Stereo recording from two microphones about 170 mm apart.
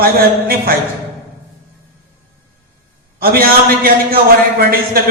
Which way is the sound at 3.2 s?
60° right (ahead or behind).